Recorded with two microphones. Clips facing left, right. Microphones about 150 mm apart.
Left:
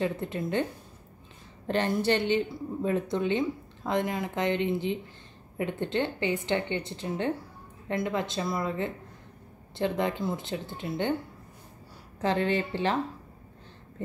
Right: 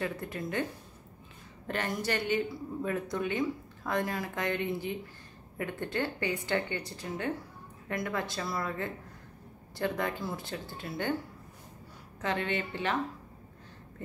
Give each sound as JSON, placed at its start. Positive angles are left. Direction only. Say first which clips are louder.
{"t": 0.0, "sound": "speech", "louder": "left 5 dB", "side_deg": 25}
{"t": 1.7, "sound": "speech", "louder": "left 7 dB", "side_deg": 30}
{"t": 12.2, "sound": "speech", "louder": "left 6 dB", "side_deg": 30}